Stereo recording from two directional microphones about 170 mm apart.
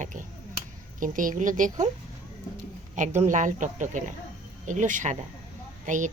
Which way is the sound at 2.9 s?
45° right (ahead or behind).